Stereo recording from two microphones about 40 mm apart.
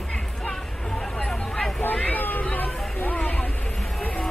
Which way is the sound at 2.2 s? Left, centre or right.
Left.